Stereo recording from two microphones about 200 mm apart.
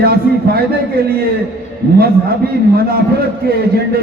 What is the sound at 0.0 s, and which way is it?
Speech, 50° right (ahead or behind).